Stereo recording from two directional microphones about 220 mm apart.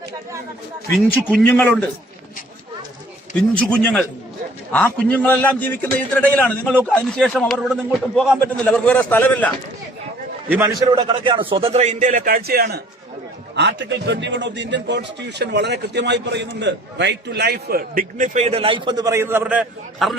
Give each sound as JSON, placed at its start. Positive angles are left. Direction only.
{"t": 0.9, "sound": "a man's voice", "side_deg": 5}
{"t": 3.6, "sound": "a man's voice", "side_deg": 5}
{"t": 10.9, "sound": "a man's voice", "side_deg": -20}